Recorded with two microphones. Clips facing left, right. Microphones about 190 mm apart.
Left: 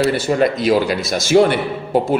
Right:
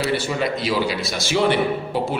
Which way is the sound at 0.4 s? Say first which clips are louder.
Left 7 dB; 50° left (ahead or behind).